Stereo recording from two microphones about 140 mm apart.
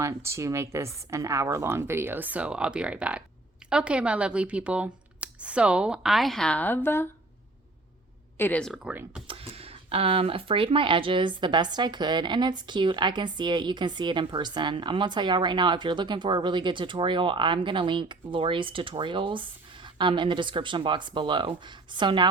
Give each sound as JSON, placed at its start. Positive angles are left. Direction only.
{"t": 0.0, "sound": "speech", "side_deg": -20}
{"t": 8.4, "sound": "speech", "side_deg": 10}
{"t": 8.8, "sound": "speech", "side_deg": -10}
{"t": 9.2, "sound": "speech", "side_deg": -40}